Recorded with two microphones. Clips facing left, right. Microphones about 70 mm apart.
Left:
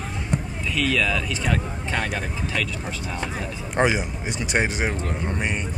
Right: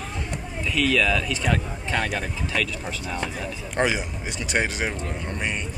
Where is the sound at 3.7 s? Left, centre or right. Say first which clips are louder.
Left 3 dB; centre.